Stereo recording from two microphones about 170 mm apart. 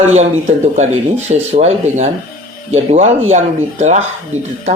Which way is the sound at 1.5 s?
40° right (ahead or behind).